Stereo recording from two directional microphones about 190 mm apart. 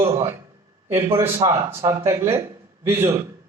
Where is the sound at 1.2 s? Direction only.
15° right (ahead or behind).